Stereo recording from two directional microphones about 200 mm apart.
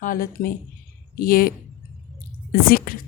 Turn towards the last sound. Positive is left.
turn(degrees=45)  # may be behind; listen again after turning